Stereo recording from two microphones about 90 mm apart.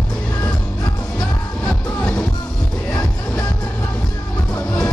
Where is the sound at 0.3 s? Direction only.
45° left (ahead or behind).